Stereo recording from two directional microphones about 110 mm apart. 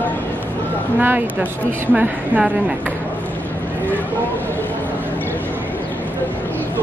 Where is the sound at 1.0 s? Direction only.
20° right (ahead or behind).